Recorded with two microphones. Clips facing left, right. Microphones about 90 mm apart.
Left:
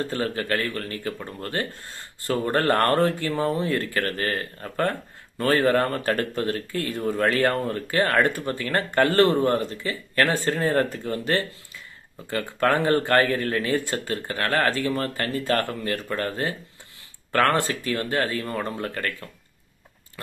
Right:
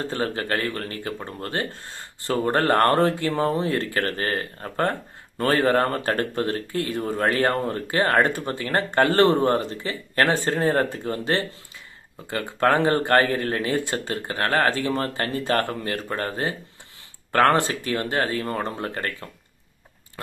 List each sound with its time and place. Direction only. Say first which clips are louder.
0.0 s speech: even; 20° right (ahead or behind)